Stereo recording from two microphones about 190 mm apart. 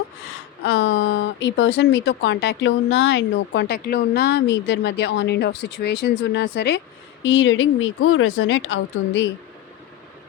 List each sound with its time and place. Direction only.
0.6 s speech: 80° left; by 6.7 s 60° left (ahead or behind)
7.2 s speech: 75° left (ahead or behind)